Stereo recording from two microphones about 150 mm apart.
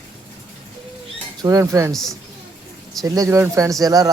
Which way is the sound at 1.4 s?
20° right (ahead or behind).